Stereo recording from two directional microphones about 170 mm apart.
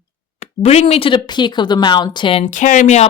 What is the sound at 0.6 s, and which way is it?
Speech, 40° left (ahead or behind).